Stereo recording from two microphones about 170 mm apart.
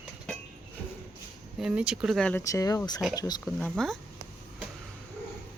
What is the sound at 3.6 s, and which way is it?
Speech, 5° left (ahead or behind).